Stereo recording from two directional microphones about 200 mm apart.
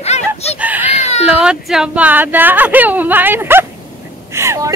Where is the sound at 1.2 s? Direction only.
5° right (ahead or behind).